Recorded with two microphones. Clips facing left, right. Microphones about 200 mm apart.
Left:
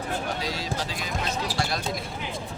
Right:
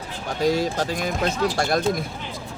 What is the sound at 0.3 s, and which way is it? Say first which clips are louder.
Speech: right 9 dB; 50° right (ahead or behind).